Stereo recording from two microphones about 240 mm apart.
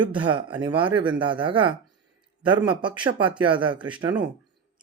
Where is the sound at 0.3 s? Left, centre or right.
Centre.